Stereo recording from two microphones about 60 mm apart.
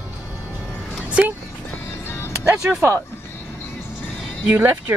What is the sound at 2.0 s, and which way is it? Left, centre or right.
Music, left.